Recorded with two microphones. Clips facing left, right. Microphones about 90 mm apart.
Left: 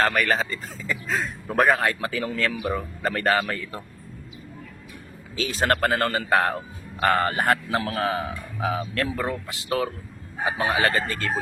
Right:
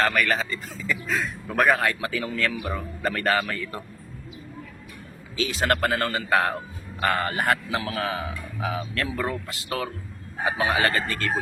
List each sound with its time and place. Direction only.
0.0 s a man's voice: 30° left (ahead or behind)
5.4 s a man's voice: 35° left (ahead or behind)